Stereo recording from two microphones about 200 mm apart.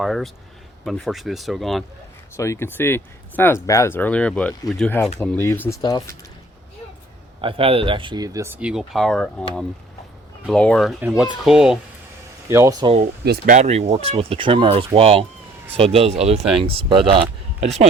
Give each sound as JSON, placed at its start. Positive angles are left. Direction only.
{"t": 0.0, "sound": "speech", "side_deg": 0}
{"t": 2.3, "sound": "speech", "side_deg": 15}
{"t": 7.4, "sound": "speech", "side_deg": -30}
{"t": 12.5, "sound": "speech", "side_deg": -15}
{"t": 13.0, "sound": "speech", "side_deg": -50}